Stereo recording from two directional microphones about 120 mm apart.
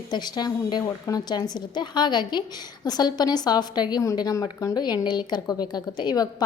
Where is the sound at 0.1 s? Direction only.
35° left (ahead or behind).